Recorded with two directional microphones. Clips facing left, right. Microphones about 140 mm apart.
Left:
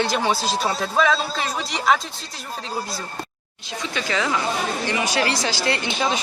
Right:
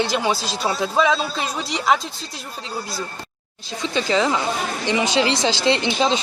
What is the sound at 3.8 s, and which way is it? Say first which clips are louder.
Speech: right 5 dB; 30° right (ahead or behind).